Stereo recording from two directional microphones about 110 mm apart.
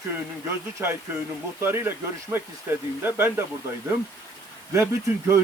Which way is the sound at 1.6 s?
20° right (ahead or behind).